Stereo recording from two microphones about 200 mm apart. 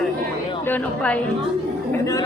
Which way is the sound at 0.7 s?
5° left (ahead or behind).